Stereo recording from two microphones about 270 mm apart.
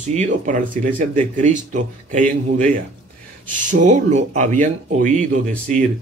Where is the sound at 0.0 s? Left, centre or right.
Right.